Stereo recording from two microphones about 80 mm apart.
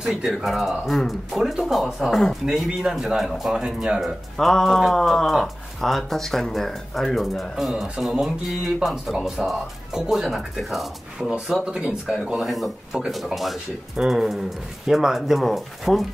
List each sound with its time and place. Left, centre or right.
0.0 s speech: centre
4.0 s speech: centre